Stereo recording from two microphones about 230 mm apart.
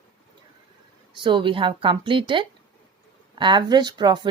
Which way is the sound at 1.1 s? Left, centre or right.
Right.